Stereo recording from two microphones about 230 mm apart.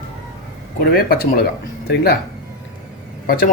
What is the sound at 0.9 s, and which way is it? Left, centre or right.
Speech, left.